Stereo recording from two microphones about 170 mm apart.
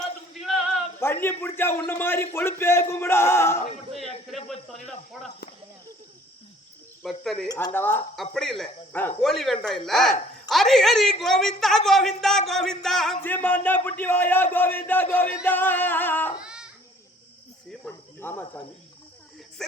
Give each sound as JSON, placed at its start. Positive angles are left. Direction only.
{"t": 0.9, "sound": "a man's voice", "side_deg": 15}
{"t": 3.9, "sound": "speech", "side_deg": 0}
{"t": 7.0, "sound": "speech", "side_deg": 0}
{"t": 7.4, "sound": "speech", "side_deg": 20}
{"t": 7.7, "sound": "a man's voice", "side_deg": 10}
{"t": 8.1, "sound": "a man's voice", "side_deg": 0}
{"t": 16.4, "sound": "baby cry", "side_deg": -5}
{"t": 17.7, "sound": "cricket", "side_deg": 10}